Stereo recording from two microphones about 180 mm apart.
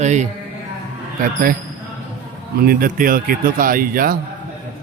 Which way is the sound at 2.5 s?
55° right (ahead or behind).